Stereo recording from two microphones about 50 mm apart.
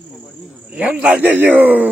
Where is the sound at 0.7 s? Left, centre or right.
Right.